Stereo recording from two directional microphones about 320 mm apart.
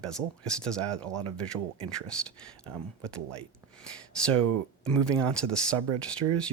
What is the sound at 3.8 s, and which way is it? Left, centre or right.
Speech, centre.